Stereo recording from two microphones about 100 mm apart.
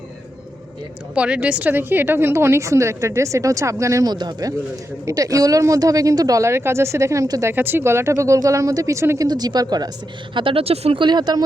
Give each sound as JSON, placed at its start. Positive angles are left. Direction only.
{"t": 1.1, "sound": "speech", "side_deg": -10}
{"t": 4.1, "sound": "speech", "side_deg": -45}
{"t": 7.5, "sound": "speech", "side_deg": -20}
{"t": 9.2, "sound": "speech", "side_deg": -45}
{"t": 10.3, "sound": "speech", "side_deg": -65}
{"t": 11.0, "sound": "speech", "side_deg": -45}